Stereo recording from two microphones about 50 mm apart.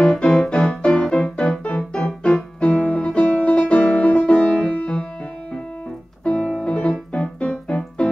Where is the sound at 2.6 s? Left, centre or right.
Left.